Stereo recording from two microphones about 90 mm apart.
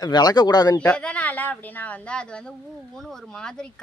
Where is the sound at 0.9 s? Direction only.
15° left (ahead or behind).